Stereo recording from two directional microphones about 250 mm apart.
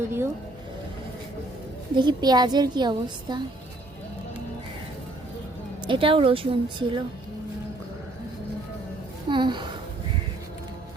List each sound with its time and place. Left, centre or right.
0.0 s a woman's voice: centre
2.0 s a woman's voice: centre
5.8 s speech: centre
9.3 s a woman's voice: centre